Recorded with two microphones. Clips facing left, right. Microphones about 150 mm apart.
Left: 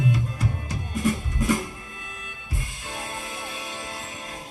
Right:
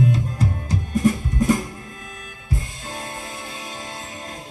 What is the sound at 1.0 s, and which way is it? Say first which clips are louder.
Music: right 5 dB; 35° right (ahead or behind).